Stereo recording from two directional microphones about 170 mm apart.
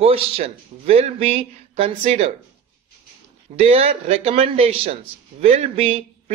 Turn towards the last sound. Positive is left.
turn(degrees=-35)  # may be behind; listen again after turning